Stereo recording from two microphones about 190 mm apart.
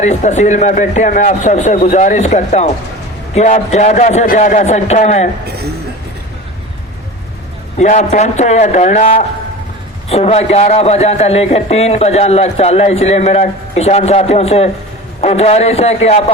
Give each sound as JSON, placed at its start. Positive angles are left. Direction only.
{"t": 0.0, "sound": "a man's voice", "side_deg": 35}
{"t": 7.8, "sound": "a man's voice", "side_deg": 35}